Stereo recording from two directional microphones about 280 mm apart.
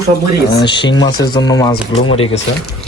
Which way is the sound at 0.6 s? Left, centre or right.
Centre.